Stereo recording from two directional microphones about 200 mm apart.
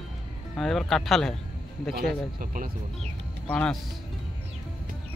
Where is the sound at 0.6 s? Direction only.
Centre (ahead or behind).